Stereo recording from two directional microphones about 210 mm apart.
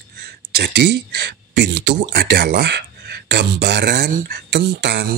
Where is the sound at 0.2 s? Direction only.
50° right (ahead or behind).